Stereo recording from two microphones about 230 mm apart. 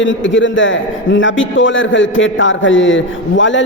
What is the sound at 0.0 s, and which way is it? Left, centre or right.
A man's voice, left.